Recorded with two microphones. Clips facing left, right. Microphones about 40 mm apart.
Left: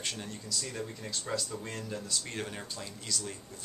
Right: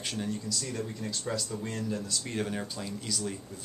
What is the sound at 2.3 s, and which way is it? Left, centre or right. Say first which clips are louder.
Speech: right 5 dB; centre.